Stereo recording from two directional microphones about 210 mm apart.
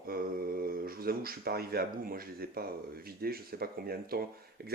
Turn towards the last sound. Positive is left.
turn(degrees=-45)  # may be behind; listen again after turning